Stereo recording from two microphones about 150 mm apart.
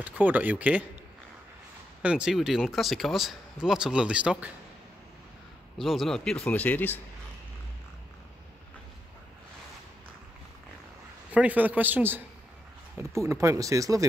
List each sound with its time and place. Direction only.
0.0 s a man's voice: 10° right (ahead or behind)
2.0 s speech: 5° right (ahead or behind)
5.8 s speech: centre (ahead or behind)
11.3 s a man's voice: 10° right (ahead or behind)